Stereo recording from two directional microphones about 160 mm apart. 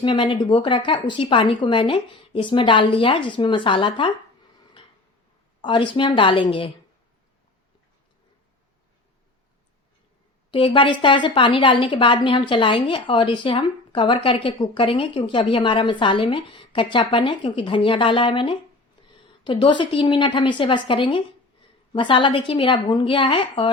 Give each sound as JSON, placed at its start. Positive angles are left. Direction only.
{"t": 0.0, "sound": "a woman's voice", "side_deg": 30}
{"t": 5.6, "sound": "a woman's voice", "side_deg": 30}
{"t": 10.5, "sound": "a woman's voice", "side_deg": 30}